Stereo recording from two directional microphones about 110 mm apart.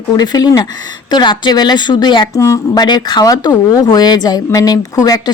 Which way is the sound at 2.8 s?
40° left (ahead or behind).